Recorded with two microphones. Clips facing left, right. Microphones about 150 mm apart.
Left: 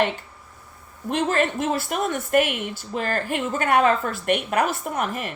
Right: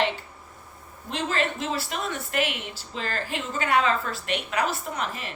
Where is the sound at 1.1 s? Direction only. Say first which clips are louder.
Left 5 dB; 50° left (ahead or behind).